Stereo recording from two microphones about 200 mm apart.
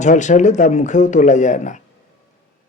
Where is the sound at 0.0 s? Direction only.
35° left (ahead or behind).